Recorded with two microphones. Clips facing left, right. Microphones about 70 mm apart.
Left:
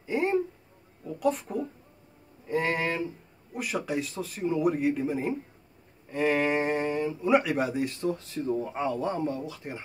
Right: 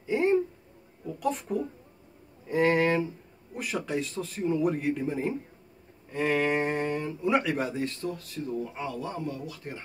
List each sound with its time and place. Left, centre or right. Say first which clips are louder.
0.0 s a sound: right 2 dB; centre
1.2 s speech: left 2 dB; centre
8.0 s speech: left 4 dB; left